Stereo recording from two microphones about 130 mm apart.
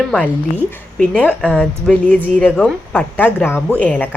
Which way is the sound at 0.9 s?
10° left (ahead or behind).